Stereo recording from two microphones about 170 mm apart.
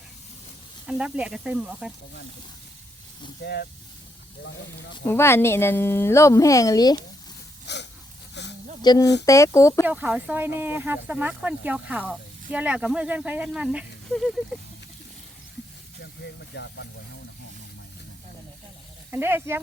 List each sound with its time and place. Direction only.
0.9 s speech: 5° right (ahead or behind)
3.4 s speech: 75° left (ahead or behind)
5.0 s speech: 15° left (ahead or behind)
7.7 s a sound: 90° left
8.8 s speech: 25° left (ahead or behind)
9.8 s speech: 10° right (ahead or behind)
16.2 s speech: 90° left
19.1 s speech: 10° right (ahead or behind)